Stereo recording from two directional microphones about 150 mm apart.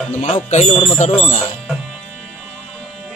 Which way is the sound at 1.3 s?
55° left (ahead or behind).